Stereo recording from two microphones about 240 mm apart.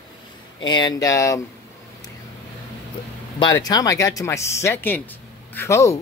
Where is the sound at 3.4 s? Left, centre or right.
Centre.